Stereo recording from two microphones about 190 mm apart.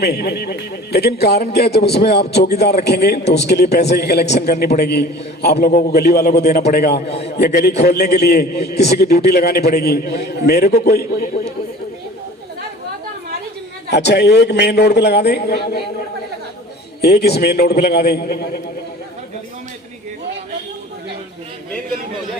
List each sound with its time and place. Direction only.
0.0 s a man's voice: 55° left (ahead or behind)
13.9 s a man's voice: 60° left (ahead or behind)
17.0 s a man's voice: 55° left (ahead or behind)